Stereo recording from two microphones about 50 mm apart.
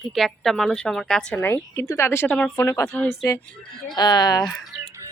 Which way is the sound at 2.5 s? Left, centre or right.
Left.